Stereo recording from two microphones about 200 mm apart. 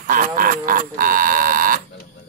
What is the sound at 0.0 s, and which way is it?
Speech, 45° right (ahead or behind).